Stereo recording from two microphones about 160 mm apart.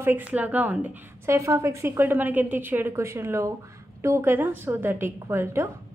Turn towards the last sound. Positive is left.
turn(degrees=-15)  # may be behind; listen again after turning